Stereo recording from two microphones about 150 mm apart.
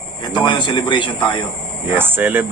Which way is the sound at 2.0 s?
15° right (ahead or behind).